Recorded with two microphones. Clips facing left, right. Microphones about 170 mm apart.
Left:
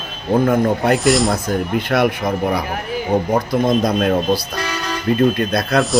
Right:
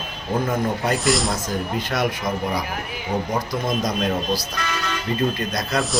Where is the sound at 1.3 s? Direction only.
60° left (ahead or behind).